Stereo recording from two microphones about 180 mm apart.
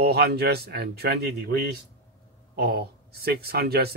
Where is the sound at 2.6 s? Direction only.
60° right (ahead or behind).